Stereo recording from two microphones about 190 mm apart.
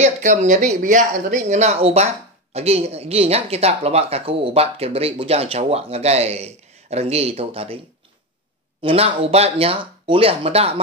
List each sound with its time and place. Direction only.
0.0 s speech: 40° right (ahead or behind)
8.8 s speech: 30° right (ahead or behind)